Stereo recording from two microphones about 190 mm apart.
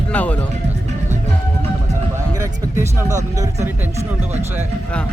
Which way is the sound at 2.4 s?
15° right (ahead or behind).